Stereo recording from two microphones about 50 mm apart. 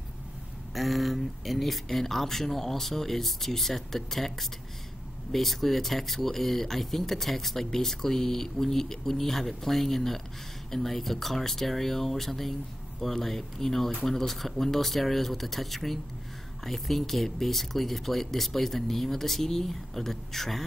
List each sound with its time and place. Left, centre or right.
0.7 s speech: centre